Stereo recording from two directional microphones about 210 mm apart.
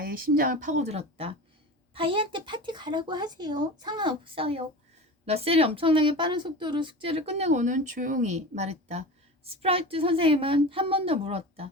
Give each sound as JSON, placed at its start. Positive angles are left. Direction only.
{"t": 0.0, "sound": "speech", "side_deg": -45}